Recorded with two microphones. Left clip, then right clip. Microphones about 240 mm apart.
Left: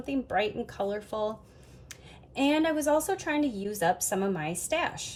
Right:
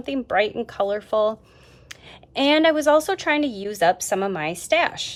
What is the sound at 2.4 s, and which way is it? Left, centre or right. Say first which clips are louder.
Speech: right 9 dB; right.